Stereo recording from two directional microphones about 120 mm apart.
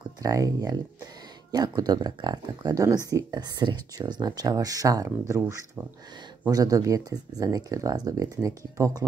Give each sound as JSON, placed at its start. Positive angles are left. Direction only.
{"t": 0.0, "sound": "speech", "side_deg": -30}